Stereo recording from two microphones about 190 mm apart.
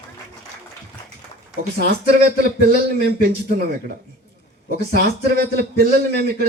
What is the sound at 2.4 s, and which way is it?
A man's voice, 55° right (ahead or behind).